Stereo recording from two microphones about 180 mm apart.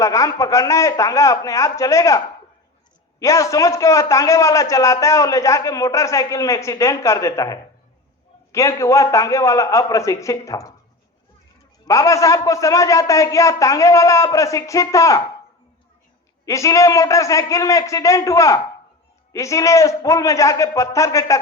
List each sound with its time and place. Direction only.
0.0 s a man's voice: 20° left (ahead or behind)
11.9 s a man's voice: 15° left (ahead or behind)
16.5 s a man's voice: 15° left (ahead or behind)